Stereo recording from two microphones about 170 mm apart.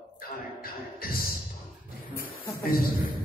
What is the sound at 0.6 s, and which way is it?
Music, 60° left (ahead or behind).